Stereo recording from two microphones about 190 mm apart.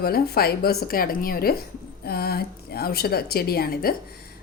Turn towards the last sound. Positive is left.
turn(degrees=50)  # may be behind; listen again after turning